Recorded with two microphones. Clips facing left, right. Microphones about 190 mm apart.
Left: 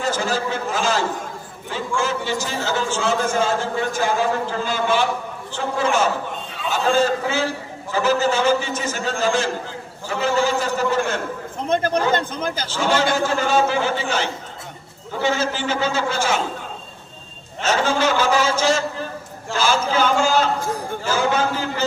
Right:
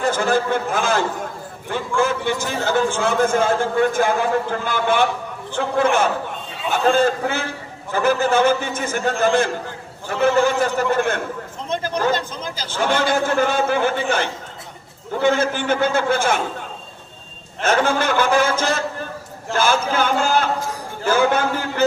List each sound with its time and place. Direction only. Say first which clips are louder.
0.0 s a man's voice: right 4 dB; 55° right (ahead or behind)
11.7 s speech: left 2 dB; 60° left (ahead or behind)
12.6 s a man's voice: right 1 dB; 55° right (ahead or behind)
17.6 s a sound: right 1 dB; 55° right (ahead or behind)